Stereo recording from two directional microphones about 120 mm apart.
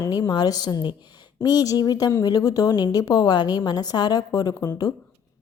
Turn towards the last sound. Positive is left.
turn(degrees=30)  # may be behind; listen again after turning